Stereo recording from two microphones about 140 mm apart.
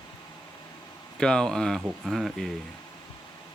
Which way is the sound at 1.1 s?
5° left (ahead or behind).